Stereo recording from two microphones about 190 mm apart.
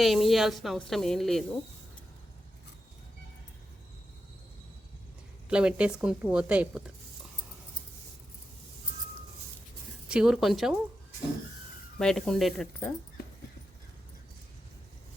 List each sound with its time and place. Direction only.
0.0 s a woman's voice: centre (ahead or behind)
5.5 s a woman's voice: 5° right (ahead or behind)
10.1 s a woman's voice: 5° right (ahead or behind)
11.9 s a woman's voice: 5° left (ahead or behind)